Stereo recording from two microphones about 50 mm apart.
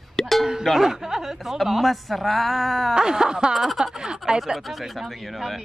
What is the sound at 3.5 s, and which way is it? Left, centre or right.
Speech, centre.